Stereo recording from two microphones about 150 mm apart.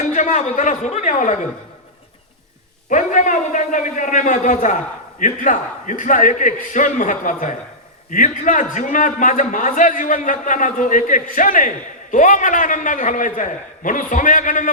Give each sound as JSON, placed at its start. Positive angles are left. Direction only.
{"t": 0.1, "sound": "a man's voice", "side_deg": 55}
{"t": 2.9, "sound": "a man's voice", "side_deg": 55}